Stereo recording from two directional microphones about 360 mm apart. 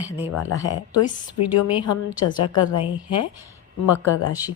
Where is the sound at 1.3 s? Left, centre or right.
Left.